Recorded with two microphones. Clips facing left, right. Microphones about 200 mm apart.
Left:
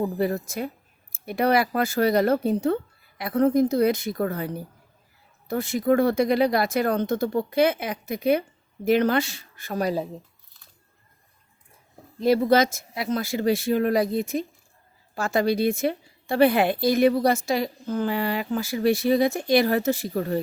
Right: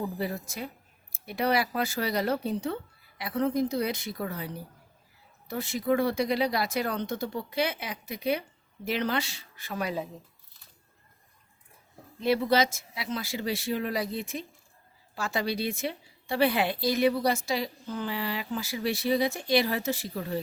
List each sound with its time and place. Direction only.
0.0 s a woman's voice: 50° left (ahead or behind)
12.2 s a woman's voice: 45° left (ahead or behind)